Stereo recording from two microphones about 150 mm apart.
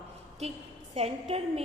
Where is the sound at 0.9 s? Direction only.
40° right (ahead or behind).